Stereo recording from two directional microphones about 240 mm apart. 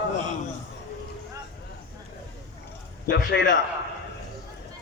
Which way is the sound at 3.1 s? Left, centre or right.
Left.